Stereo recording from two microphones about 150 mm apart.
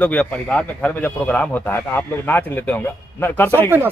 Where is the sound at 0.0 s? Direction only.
10° left (ahead or behind).